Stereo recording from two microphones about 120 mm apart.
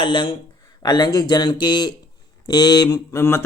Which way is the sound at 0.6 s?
35° left (ahead or behind).